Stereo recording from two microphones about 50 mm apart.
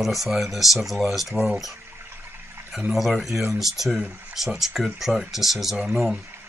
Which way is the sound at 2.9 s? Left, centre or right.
Centre.